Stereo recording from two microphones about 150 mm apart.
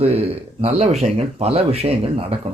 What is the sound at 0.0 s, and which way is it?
Speech, 40° right (ahead or behind).